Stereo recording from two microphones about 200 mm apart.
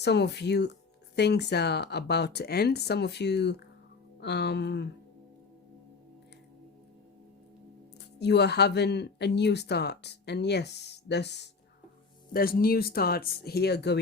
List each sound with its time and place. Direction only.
0.0 s speech: 55° left (ahead or behind)
8.2 s speech: 55° left (ahead or behind)
12.3 s speech: 45° left (ahead or behind)